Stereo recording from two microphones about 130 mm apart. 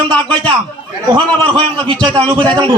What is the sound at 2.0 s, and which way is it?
Speech, 10° left (ahead or behind).